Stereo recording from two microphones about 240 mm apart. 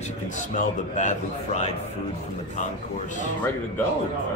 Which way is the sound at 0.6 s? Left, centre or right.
Left.